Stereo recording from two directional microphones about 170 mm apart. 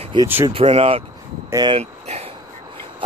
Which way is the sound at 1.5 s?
25° right (ahead or behind).